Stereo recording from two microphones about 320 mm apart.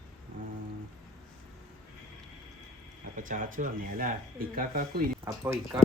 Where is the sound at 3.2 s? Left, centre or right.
Right.